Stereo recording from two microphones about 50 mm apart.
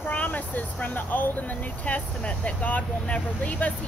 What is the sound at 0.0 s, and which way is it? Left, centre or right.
Speech, left.